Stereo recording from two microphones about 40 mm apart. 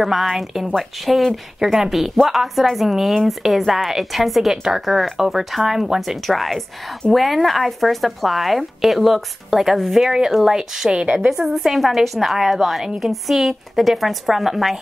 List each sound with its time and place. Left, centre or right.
0.0 s speech: centre
10.0 s speech: centre